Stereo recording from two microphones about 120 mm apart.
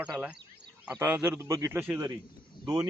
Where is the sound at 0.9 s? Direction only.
20° right (ahead or behind).